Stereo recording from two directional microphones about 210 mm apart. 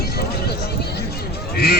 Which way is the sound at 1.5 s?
50° left (ahead or behind).